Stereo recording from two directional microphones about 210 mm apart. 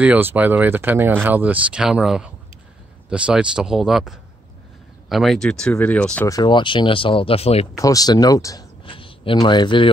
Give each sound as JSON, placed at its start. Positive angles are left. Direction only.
{"t": 0.0, "sound": "speech", "side_deg": -10}
{"t": 7.7, "sound": "speech", "side_deg": 15}